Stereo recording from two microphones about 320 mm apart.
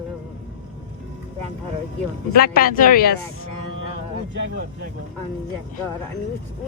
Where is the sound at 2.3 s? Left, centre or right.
Left.